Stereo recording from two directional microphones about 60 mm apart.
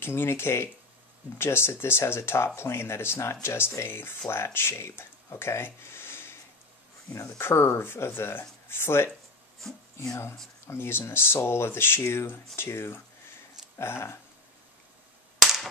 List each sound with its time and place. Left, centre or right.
0.0 s speech: left
7.1 s speech: left
10.7 s speech: left
15.3 s a sound: centre